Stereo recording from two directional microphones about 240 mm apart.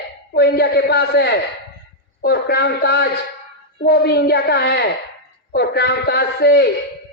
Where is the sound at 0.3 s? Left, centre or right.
Left.